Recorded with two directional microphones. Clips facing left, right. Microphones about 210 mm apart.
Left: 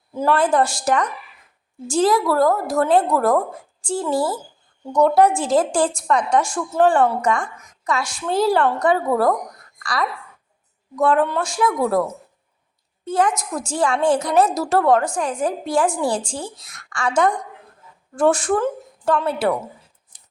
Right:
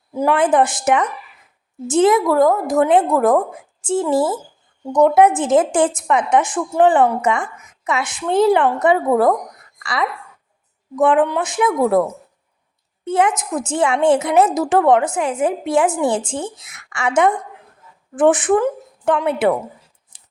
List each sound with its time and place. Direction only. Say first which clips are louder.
0.1 s a woman's voice: right 2 dB; 15° right (ahead or behind)
7.4 s a woman's voice: right 2 dB; 5° right (ahead or behind)
7.9 s a woman's voice: right 2 dB; 20° right (ahead or behind)
13.1 s a woman's voice: right 2 dB; 25° right (ahead or behind)